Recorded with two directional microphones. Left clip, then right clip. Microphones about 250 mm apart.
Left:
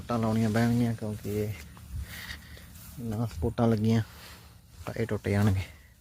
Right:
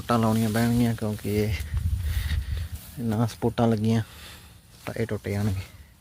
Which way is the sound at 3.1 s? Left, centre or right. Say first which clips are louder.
Right 6 dB; right.